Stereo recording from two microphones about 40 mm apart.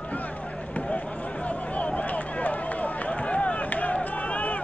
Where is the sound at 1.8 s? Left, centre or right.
Left.